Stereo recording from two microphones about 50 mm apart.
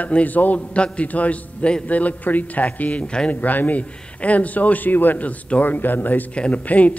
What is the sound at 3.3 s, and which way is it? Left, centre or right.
A man's voice, left.